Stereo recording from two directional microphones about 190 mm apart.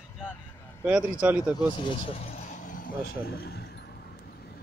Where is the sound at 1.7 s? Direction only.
25° left (ahead or behind); by 3.8 s 55° left (ahead or behind).